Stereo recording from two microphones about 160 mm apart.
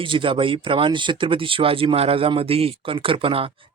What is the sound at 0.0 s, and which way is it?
Speech, 35° right (ahead or behind).